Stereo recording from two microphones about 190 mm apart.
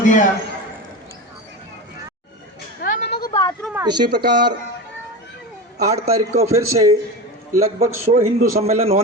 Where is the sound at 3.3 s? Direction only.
20° left (ahead or behind).